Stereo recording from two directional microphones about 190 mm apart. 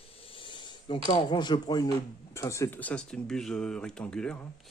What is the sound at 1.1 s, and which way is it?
Speech, 25° left (ahead or behind).